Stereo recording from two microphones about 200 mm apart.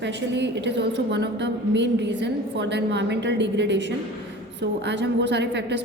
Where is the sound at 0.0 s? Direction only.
60° right (ahead or behind).